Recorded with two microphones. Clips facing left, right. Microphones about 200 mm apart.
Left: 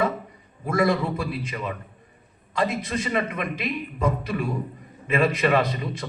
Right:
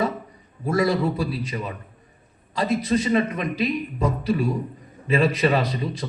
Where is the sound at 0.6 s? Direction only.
35° right (ahead or behind).